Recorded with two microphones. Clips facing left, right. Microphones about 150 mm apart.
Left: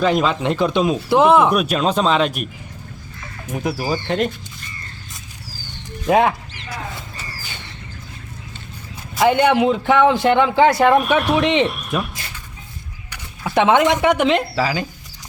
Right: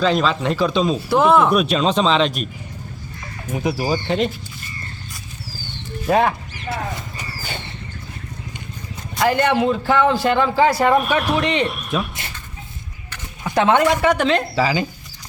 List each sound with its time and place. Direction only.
0.0 s speech: 15° left (ahead or behind)
3.5 s speech: centre (ahead or behind)
6.1 s speech: 10° left (ahead or behind)
9.4 s speech: 15° left (ahead or behind)
10.6 s speech: 5° right (ahead or behind)
13.6 s speech: 20° left (ahead or behind)
14.5 s speech: centre (ahead or behind)